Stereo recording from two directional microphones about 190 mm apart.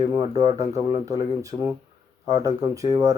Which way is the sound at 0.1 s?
20° right (ahead or behind).